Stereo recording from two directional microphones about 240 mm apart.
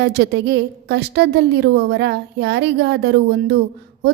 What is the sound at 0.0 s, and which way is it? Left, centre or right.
A woman's voice, right.